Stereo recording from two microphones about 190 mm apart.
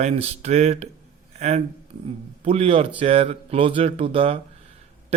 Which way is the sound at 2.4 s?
30° right (ahead or behind).